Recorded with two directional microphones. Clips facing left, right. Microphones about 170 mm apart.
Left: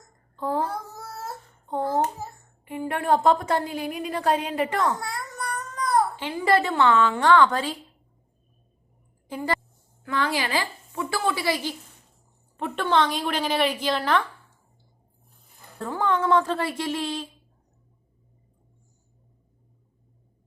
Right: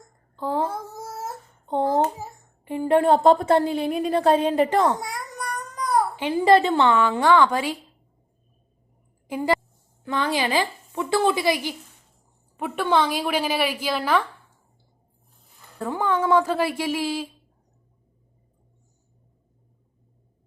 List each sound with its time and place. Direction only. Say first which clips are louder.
0.4 s a sound: right 1 dB; 20° right (ahead or behind)
1.6 s hands: right 3 dB; 20° right (ahead or behind)
2.6 s a woman's voice: right 6 dB; 30° right (ahead or behind)
4.9 s babbling: right 1 dB; 15° right (ahead or behind)
6.4 s a woman's voice: right 3 dB; 20° right (ahead or behind)
10.0 s a woman's voice: right 2 dB; 20° right (ahead or behind); by 14.2 s 5° right (ahead or behind)
15.8 s a woman's voice: right 1 dB; 10° right (ahead or behind)